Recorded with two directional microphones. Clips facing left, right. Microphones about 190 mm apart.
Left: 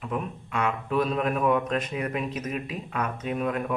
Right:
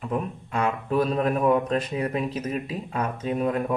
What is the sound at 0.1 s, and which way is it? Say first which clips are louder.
Speech: right 3 dB; 40° right (ahead or behind).